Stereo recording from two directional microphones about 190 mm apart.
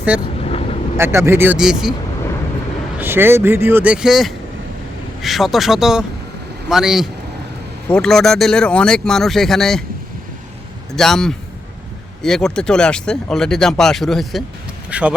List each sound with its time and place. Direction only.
0.1 s speech: 5° right (ahead or behind)
0.4 s vehicle: 35° left (ahead or behind)
0.9 s speech: 15° right (ahead or behind)
3.0 s speech: 10° right (ahead or behind)
10.9 s speech: centre (ahead or behind)